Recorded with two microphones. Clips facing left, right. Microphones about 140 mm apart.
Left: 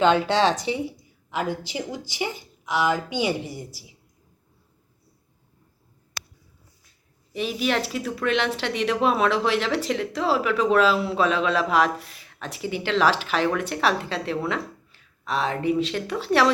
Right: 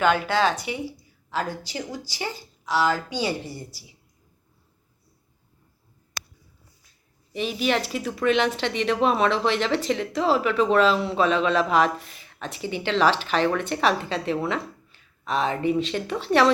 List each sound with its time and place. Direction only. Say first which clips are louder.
0.0 s a woman's voice: left 2 dB; 25° left (ahead or behind)
6.2 s a sound: right 1 dB; 50° right (ahead or behind)
7.3 s speech: even; centre (ahead or behind)